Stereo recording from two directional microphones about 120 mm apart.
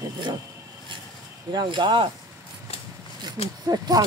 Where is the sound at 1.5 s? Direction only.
35° right (ahead or behind).